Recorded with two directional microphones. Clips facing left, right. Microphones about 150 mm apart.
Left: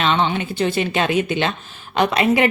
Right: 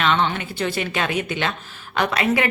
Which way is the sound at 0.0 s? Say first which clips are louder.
Left 2 dB; 20° left (ahead or behind).